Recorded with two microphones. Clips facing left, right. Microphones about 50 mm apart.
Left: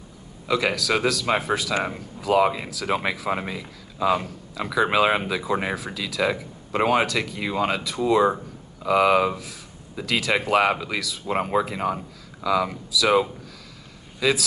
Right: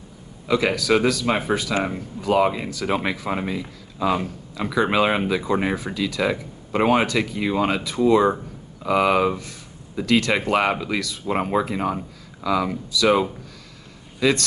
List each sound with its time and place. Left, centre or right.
0.5 s speech: centre